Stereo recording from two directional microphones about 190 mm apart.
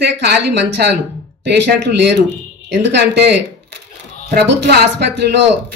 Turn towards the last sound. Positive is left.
turn(degrees=-60)  # may be behind; listen again after turning